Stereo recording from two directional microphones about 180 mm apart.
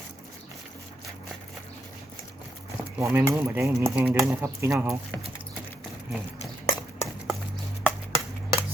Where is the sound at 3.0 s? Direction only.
10° right (ahead or behind).